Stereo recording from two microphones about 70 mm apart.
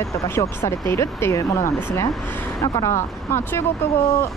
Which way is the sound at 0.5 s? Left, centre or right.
Left.